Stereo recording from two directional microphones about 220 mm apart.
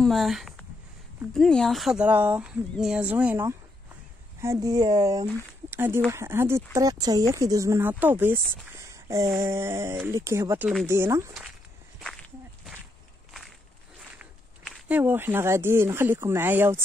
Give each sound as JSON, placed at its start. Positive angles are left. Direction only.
{"t": 0.0, "sound": "speech", "side_deg": 0}
{"t": 12.0, "sound": "walk", "side_deg": 0}
{"t": 14.1, "sound": "speech", "side_deg": -5}